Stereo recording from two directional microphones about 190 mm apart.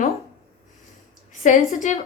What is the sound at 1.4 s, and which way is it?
Speech, 40° left (ahead or behind).